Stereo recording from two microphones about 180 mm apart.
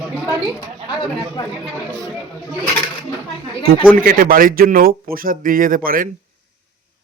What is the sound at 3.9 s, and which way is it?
Speech, 50° right (ahead or behind).